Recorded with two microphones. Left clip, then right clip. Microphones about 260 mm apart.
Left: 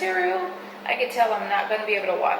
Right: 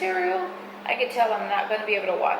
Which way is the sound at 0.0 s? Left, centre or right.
Centre.